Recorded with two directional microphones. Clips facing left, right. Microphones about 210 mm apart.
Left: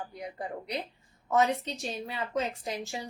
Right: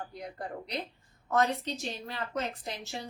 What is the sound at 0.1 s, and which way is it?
A woman's voice, 10° left (ahead or behind).